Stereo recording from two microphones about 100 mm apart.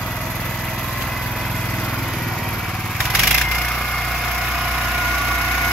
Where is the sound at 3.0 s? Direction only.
Centre (ahead or behind).